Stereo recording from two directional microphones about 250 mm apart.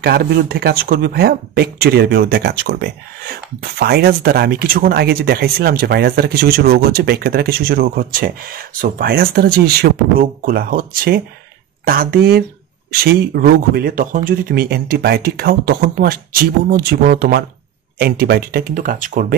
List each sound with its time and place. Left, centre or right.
0.0 s speech: right